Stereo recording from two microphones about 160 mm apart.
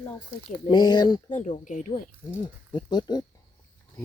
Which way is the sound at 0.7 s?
25° left (ahead or behind).